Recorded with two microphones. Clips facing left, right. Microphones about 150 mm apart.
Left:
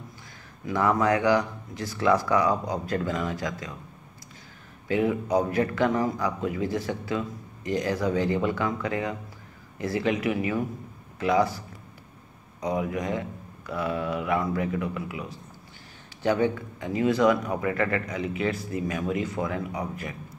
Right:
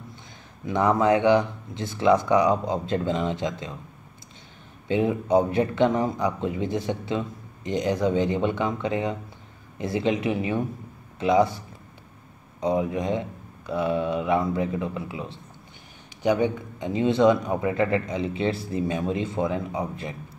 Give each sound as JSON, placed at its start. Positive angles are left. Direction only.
{"t": 0.7, "sound": "speech", "side_deg": -25}
{"t": 4.8, "sound": "speech", "side_deg": -25}
{"t": 16.2, "sound": "speech", "side_deg": -15}